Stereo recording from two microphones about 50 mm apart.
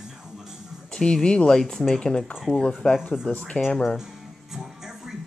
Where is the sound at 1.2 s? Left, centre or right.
Centre.